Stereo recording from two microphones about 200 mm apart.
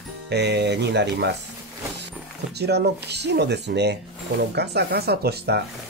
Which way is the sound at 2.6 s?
55° right (ahead or behind).